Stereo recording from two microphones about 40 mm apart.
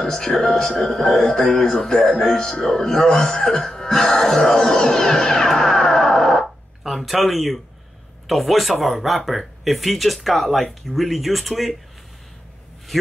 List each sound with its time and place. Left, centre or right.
0.0 s speech: centre
6.8 s speech: centre